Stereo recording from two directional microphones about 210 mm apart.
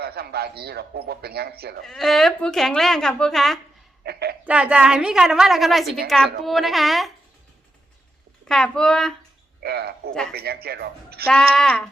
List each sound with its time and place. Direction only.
0.0 s a man's voice: 50° right (ahead or behind)
1.9 s a woman's voice: centre (ahead or behind)
4.0 s a man's voice: 50° right (ahead or behind)
4.4 s a woman's voice: 5° right (ahead or behind)
8.4 s a woman's voice: 5° left (ahead or behind)
9.6 s a man's voice: 50° right (ahead or behind)
11.3 s a woman's voice: 5° left (ahead or behind)